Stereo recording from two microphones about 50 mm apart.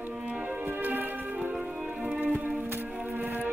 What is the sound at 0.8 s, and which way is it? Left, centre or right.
Music, right.